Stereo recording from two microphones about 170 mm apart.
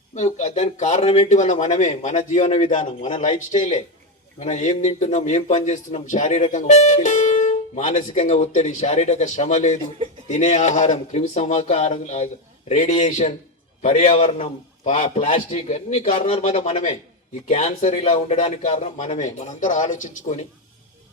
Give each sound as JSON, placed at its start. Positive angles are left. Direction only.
{"t": 0.1, "sound": "a man's voice", "side_deg": 45}